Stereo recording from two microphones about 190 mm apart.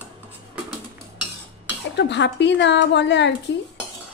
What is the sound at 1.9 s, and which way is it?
Speech, 65° left (ahead or behind).